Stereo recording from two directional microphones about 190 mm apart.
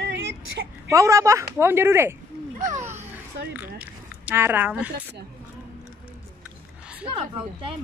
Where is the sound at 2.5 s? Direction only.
40° right (ahead or behind).